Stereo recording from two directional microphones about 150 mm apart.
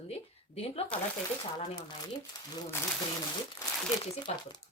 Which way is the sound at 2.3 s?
25° left (ahead or behind).